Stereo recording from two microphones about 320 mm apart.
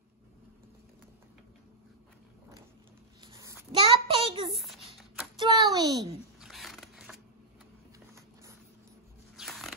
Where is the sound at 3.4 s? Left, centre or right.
Centre.